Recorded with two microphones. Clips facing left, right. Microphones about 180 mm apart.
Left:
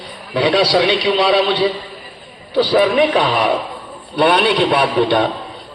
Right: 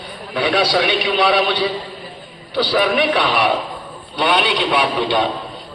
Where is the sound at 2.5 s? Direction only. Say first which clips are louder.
Left 4 dB; 30° left (ahead or behind).